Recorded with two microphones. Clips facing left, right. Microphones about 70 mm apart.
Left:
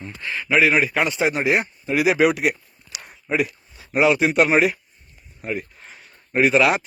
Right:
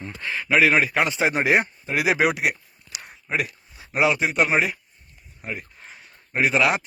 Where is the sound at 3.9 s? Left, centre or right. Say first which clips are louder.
Left 3 dB; centre.